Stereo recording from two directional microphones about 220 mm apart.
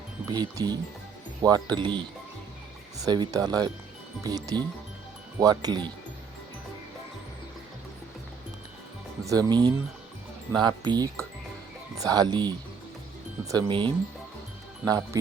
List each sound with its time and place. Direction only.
0.3 s speech: 20° right (ahead or behind)
9.2 s speech: 15° right (ahead or behind)